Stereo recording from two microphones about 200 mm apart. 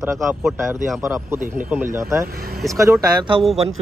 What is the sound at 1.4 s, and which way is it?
Speech, 45° right (ahead or behind).